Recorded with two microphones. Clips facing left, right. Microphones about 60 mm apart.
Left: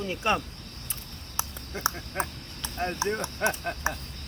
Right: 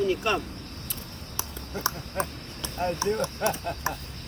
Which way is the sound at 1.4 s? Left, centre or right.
Left.